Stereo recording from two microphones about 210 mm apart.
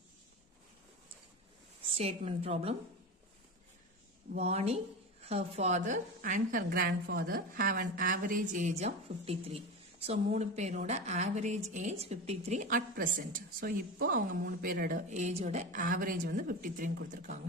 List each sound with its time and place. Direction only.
2.0 s a woman's voice: 30° right (ahead or behind)
4.4 s a woman's voice: 30° right (ahead or behind)